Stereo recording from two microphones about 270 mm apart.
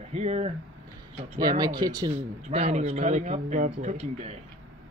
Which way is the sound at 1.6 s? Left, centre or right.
Centre.